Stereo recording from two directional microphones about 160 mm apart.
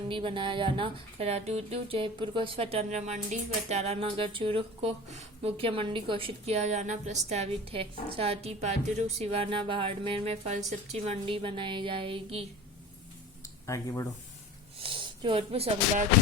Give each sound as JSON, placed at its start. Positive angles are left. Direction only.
{"t": 0.1, "sound": "speech", "side_deg": -30}
{"t": 13.7, "sound": "speech", "side_deg": 20}
{"t": 14.8, "sound": "a sound", "side_deg": -35}